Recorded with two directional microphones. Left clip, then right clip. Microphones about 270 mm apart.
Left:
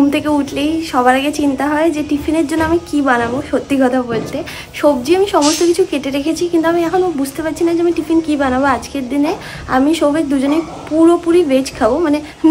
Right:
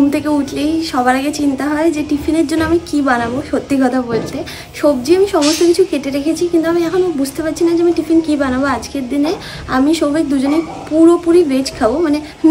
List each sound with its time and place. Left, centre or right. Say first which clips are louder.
0.1 s a woman's voice: left 1 dB; centre